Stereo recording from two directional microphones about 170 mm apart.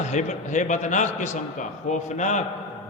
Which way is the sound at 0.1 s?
45° left (ahead or behind).